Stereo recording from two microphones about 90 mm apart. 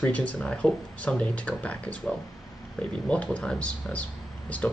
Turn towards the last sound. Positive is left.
turn(degrees=15)  # may be behind; listen again after turning